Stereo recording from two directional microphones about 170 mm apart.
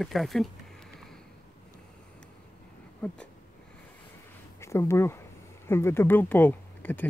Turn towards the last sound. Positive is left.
turn(degrees=10)  # may be behind; listen again after turning